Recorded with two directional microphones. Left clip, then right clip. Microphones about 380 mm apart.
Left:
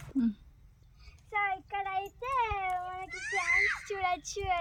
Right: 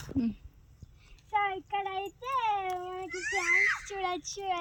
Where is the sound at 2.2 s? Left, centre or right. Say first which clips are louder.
Right 2 dB; centre.